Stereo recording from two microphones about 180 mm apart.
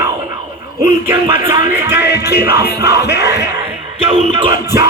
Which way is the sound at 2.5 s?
60° left (ahead or behind).